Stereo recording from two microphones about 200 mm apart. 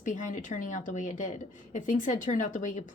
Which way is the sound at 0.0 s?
40° left (ahead or behind).